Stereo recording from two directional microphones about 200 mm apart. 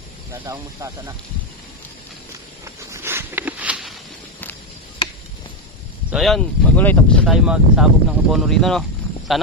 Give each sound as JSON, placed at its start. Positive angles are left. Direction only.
{"t": 0.3, "sound": "speech", "side_deg": -15}
{"t": 2.6, "sound": "a sound", "side_deg": -15}
{"t": 5.0, "sound": "chop", "side_deg": 25}
{"t": 6.0, "sound": "speech", "side_deg": 0}